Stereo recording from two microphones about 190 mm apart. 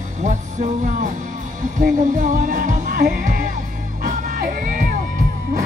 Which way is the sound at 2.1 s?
40° right (ahead or behind).